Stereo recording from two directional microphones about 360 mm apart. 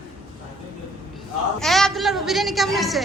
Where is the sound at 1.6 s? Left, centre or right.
Centre.